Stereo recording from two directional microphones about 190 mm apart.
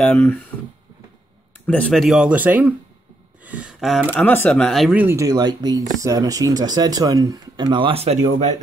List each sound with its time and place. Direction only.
0.0 s speech: 10° left (ahead or behind)
1.7 s speech: 5° left (ahead or behind)
3.4 s a sound: 5° right (ahead or behind)
4.1 s speech: 10° left (ahead or behind); by 8.2 s 30° right (ahead or behind)